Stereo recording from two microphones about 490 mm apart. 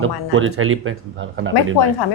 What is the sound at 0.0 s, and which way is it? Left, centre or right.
Speech, right.